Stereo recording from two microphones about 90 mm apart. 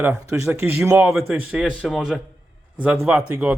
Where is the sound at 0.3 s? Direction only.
30° right (ahead or behind).